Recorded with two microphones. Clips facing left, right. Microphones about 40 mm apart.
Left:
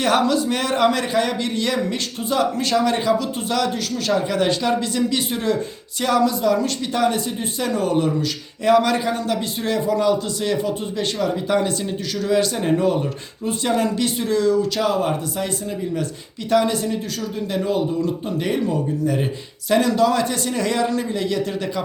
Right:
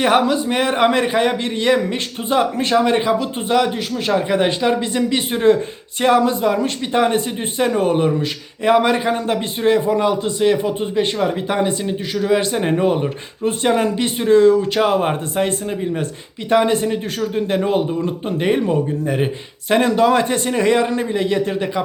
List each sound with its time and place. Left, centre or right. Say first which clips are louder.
0.0 s a man's voice: right 3 dB; right